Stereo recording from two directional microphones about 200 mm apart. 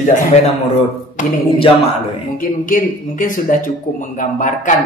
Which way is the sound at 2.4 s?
45° left (ahead or behind).